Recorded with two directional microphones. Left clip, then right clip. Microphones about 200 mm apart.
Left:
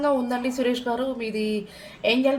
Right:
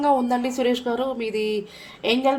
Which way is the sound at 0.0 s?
40° right (ahead or behind).